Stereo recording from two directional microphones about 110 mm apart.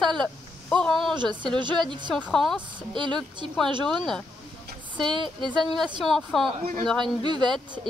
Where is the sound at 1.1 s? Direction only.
45° right (ahead or behind).